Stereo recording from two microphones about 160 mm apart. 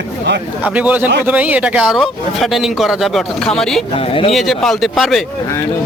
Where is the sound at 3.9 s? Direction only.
35° left (ahead or behind).